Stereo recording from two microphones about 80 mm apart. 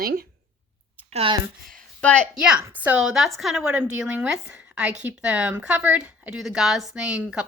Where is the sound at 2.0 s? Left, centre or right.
Centre.